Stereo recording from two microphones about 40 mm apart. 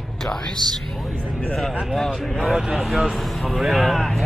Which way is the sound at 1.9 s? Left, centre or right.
Centre.